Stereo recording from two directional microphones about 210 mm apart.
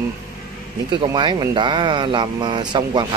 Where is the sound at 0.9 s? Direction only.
20° right (ahead or behind).